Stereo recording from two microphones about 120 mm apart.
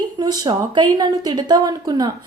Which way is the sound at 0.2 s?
35° right (ahead or behind).